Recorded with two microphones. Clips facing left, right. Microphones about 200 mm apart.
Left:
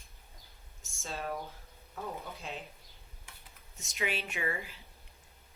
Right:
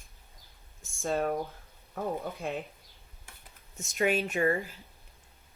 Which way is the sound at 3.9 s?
50° right (ahead or behind).